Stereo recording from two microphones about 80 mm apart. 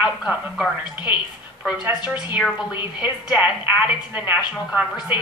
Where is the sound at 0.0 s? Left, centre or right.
Centre.